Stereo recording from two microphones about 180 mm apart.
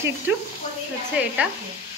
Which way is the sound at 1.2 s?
5° right (ahead or behind).